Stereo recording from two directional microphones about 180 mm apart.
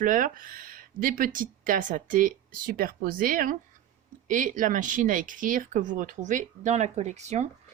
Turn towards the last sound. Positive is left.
turn(degrees=-40)  # may be behind; listen again after turning